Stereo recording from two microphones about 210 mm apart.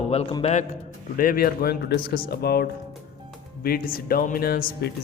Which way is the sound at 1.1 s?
40° left (ahead or behind).